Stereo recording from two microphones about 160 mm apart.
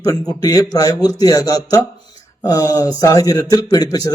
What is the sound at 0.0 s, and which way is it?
A man's voice, 20° left (ahead or behind).